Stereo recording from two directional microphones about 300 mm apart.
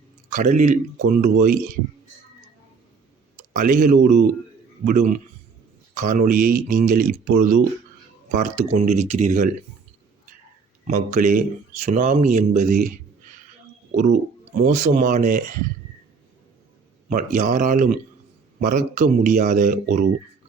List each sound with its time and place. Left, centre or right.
0.3 s speech: right
3.5 s speech: right
10.8 s speech: right
13.9 s speech: right
17.1 s speech: right